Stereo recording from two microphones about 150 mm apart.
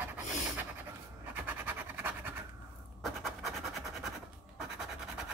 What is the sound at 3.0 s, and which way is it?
Scratch, centre (ahead or behind).